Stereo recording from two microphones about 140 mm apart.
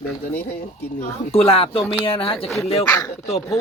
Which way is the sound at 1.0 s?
45° left (ahead or behind).